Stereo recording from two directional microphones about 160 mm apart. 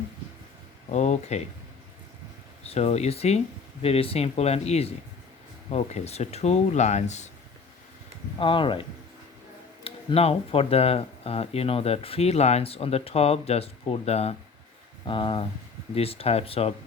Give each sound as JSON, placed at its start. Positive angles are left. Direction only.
{"t": 0.9, "sound": "speech", "side_deg": 45}
{"t": 2.6, "sound": "speech", "side_deg": 40}
{"t": 8.4, "sound": "speech", "side_deg": 30}
{"t": 9.8, "sound": "speech", "side_deg": 35}